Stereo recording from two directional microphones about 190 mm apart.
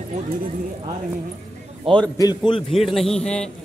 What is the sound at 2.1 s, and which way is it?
Speech, 20° left (ahead or behind).